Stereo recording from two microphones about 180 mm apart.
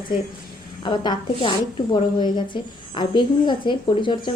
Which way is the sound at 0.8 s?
25° left (ahead or behind).